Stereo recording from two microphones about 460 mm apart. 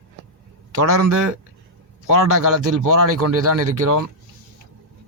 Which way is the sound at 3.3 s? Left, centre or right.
Right.